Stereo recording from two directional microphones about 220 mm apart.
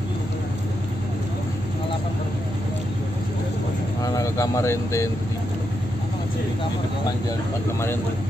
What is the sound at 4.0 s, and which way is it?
Speech, 15° left (ahead or behind).